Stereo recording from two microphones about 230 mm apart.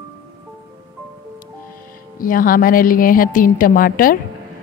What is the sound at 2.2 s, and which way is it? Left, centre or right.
Speech, left.